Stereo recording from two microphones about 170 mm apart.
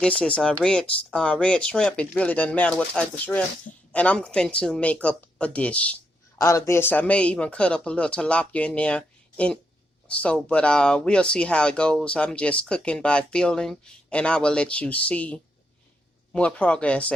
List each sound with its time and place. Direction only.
0.0 s speech: 5° left (ahead or behind)